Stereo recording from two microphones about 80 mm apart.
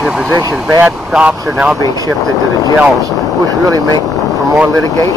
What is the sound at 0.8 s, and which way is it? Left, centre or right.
Speech, centre.